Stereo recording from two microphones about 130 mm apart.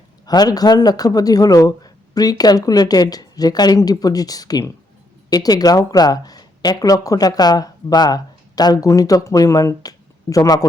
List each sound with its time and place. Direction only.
0.3 s speech: 30° left (ahead or behind)